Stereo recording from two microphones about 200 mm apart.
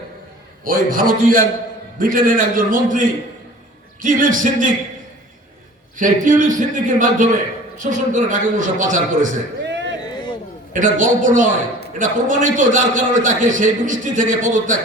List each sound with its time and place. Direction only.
0.6 s a man's voice: 45° right (ahead or behind)
6.0 s a man's voice: 40° right (ahead or behind)
9.6 s a sound: 60° right (ahead or behind)
10.7 s a man's voice: 40° right (ahead or behind)